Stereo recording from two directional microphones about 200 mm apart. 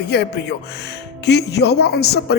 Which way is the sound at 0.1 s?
55° left (ahead or behind).